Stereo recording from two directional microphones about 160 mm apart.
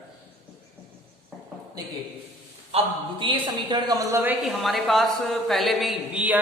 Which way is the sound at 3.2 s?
30° right (ahead or behind).